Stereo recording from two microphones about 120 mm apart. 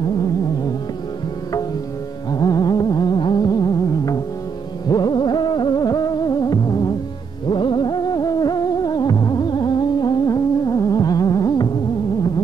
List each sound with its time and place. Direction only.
2.3 s music: 35° left (ahead or behind)